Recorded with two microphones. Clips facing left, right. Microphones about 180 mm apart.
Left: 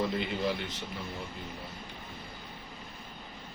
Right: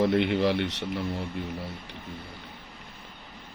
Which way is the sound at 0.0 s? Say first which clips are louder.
Right 8 dB; 70° right (ahead or behind).